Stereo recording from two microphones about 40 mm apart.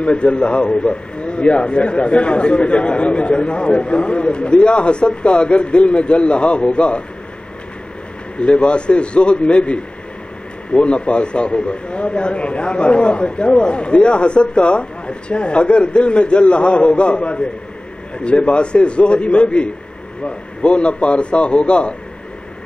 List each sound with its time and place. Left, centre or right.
0.0 s a man's voice: left
8.4 s a man's voice: left